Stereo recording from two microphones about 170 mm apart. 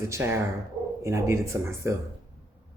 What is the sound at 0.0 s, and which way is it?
Speech, 15° right (ahead or behind).